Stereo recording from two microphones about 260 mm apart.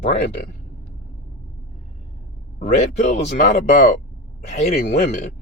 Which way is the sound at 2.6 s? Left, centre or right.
Left.